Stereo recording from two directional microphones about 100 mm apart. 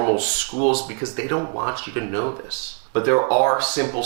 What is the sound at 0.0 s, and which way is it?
Speech, 15° right (ahead or behind).